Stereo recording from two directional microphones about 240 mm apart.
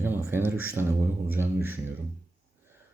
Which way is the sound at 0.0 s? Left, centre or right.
Centre.